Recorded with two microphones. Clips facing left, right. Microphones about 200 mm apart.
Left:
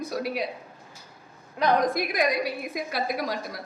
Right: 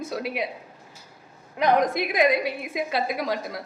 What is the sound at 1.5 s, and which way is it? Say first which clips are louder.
A woman's voice: right 2 dB; 20° right (ahead or behind).